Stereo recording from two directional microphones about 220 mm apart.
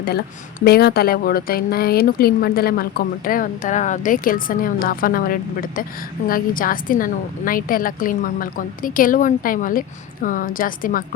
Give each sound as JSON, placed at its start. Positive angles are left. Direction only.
{"t": 0.6, "sound": "speech", "side_deg": 45}